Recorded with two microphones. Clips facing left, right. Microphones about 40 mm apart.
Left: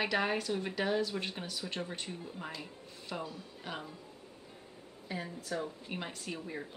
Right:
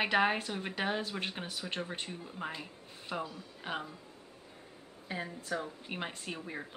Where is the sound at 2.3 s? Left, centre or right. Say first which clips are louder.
Right 2 dB; centre.